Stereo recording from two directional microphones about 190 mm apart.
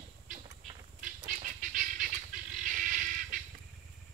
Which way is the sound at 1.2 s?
45° right (ahead or behind).